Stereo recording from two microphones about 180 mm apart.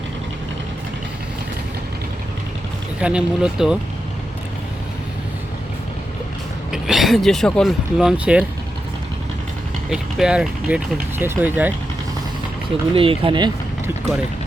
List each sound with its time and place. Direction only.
3.0 s speech: 5° right (ahead or behind)
6.7 s speech: centre (ahead or behind)
9.9 s speech: 5° right (ahead or behind)
12.9 s speech: 30° right (ahead or behind)